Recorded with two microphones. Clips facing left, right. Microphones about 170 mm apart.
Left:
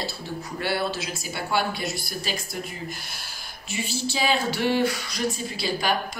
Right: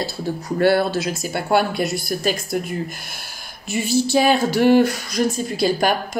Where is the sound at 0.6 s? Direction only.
45° right (ahead or behind).